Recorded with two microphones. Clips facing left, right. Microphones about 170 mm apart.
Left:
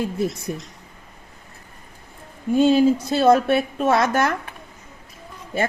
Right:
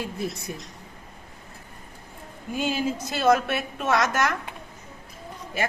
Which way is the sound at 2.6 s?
35° left (ahead or behind).